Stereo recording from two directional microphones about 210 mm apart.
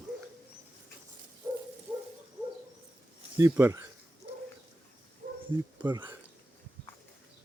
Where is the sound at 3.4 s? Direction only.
10° right (ahead or behind).